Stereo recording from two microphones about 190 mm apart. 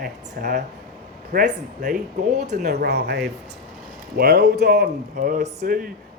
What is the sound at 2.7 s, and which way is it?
Speech, 60° right (ahead or behind).